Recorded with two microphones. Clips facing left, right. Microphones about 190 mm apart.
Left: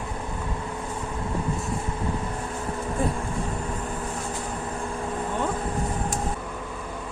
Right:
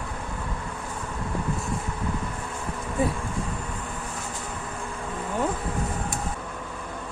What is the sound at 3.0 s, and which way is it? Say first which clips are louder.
Speech: right 2 dB; 5° right (ahead or behind).